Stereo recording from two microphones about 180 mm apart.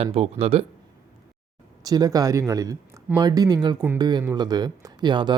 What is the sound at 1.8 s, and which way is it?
Speech, 20° right (ahead or behind).